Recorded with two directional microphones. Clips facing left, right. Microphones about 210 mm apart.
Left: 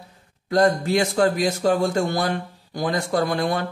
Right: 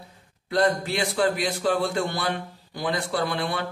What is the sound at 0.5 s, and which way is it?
Speech, 45° left (ahead or behind).